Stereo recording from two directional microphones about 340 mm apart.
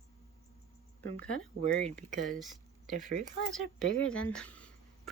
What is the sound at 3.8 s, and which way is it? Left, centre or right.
Speech, left.